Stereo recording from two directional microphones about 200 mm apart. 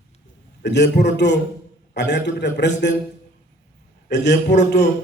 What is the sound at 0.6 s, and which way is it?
A man's voice, 60° left (ahead or behind).